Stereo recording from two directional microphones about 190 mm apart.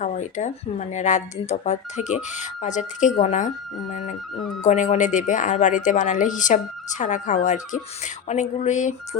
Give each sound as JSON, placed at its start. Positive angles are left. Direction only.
{"t": 0.0, "sound": "speech", "side_deg": 40}